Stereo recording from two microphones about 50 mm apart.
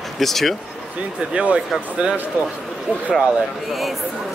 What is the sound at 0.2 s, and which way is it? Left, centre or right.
Speech, centre.